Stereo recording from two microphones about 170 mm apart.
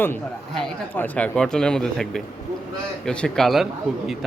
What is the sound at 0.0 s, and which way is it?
Speech, 10° left (ahead or behind).